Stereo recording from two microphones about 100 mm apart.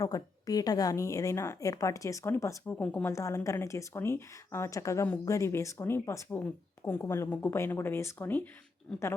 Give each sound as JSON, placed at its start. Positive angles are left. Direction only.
{"t": 0.0, "sound": "a woman's voice", "side_deg": 35}
{"t": 3.1, "sound": "a woman's voice", "side_deg": 30}